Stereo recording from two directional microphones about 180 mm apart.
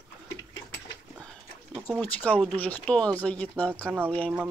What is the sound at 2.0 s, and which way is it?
Speech, 10° left (ahead or behind).